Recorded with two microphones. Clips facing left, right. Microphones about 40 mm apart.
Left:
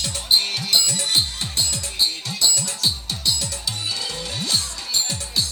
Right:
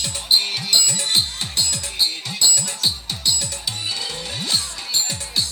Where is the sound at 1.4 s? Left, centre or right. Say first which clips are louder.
Right 1 dB; right.